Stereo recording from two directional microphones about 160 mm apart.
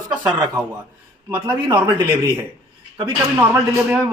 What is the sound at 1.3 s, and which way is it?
Speech, 30° right (ahead or behind).